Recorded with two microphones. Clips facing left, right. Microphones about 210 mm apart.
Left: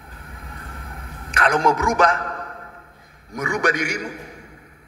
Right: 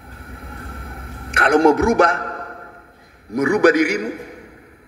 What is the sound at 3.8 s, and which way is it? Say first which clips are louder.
Speech: right 8 dB; 60° right (ahead or behind).